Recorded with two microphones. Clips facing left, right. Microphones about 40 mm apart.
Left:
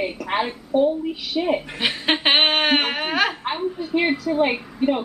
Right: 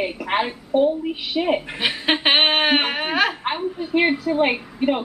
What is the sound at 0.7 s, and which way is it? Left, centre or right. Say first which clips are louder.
Speech: right 1 dB; right.